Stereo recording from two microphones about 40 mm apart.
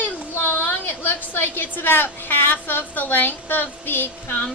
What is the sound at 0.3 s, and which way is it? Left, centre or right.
A woman's voice, left.